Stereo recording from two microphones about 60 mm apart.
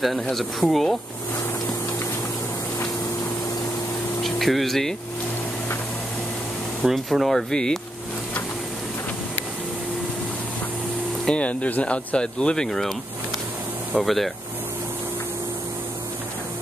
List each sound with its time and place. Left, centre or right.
0.0 s speech: centre
4.2 s speech: centre
6.8 s speech: centre
11.2 s speech: left
12.6 s speech: centre
13.9 s speech: centre